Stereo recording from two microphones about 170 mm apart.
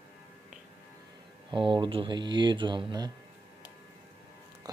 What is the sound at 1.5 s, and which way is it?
Speech, 30° right (ahead or behind).